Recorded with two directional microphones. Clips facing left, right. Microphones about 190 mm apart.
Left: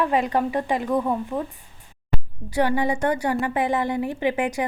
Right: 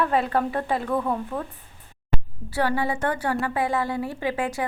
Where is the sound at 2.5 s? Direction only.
15° left (ahead or behind).